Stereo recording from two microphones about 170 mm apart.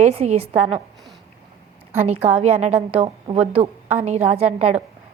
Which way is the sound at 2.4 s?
40° right (ahead or behind).